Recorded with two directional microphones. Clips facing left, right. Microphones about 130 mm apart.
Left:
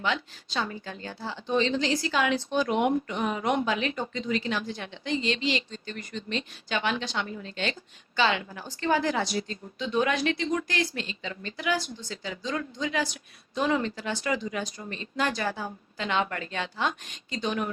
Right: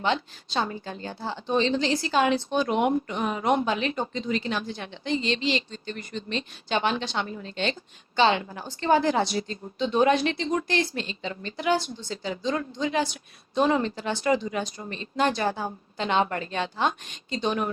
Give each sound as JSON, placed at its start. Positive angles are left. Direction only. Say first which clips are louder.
{"t": 0.0, "sound": "speech", "louder": "right 3 dB", "side_deg": -30}